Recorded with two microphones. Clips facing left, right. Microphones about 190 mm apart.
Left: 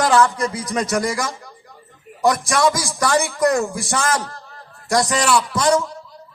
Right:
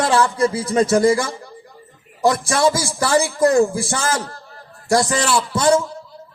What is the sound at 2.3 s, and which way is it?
A man's voice, 30° right (ahead or behind).